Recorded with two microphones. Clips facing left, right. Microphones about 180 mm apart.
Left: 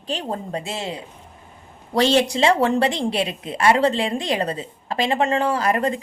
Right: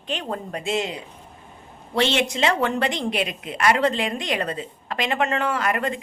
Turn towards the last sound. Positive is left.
turn(degrees=35)  # may be behind; listen again after turning